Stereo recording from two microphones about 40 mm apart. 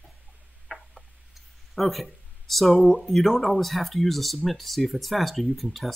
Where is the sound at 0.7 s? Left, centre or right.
Left.